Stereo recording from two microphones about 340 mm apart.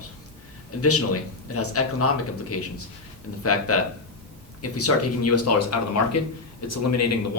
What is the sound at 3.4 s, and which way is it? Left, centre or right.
Speech, left.